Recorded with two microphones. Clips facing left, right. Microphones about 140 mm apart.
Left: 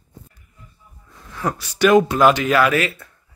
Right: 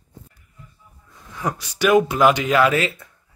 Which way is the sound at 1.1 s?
15° right (ahead or behind).